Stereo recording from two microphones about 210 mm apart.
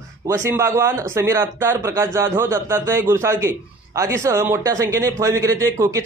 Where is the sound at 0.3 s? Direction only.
15° right (ahead or behind).